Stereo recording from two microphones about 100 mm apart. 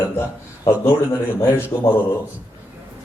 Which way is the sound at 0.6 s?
25° left (ahead or behind).